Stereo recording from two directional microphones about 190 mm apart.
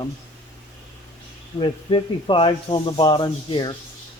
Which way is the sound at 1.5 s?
25° left (ahead or behind).